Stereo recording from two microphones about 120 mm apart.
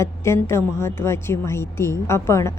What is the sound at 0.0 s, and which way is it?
Speech, 20° left (ahead or behind).